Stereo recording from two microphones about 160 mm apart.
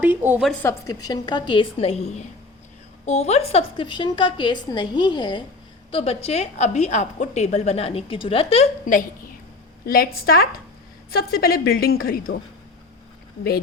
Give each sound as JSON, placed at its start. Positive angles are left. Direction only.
{"t": 0.0, "sound": "a woman's voice", "side_deg": -10}
{"t": 0.6, "sound": "a woman's voice", "side_deg": 20}
{"t": 5.9, "sound": "a woman's voice", "side_deg": 40}
{"t": 9.8, "sound": "a woman's voice", "side_deg": 70}